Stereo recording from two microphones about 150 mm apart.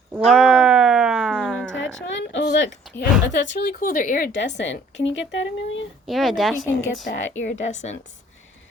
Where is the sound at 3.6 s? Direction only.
70° left (ahead or behind).